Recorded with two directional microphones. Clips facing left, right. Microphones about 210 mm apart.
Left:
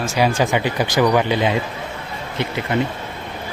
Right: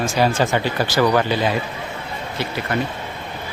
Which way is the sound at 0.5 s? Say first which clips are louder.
Left 1 dB; 15° left (ahead or behind).